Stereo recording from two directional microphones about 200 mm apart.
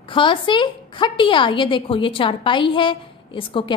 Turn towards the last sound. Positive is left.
turn(degrees=25)  # may be behind; listen again after turning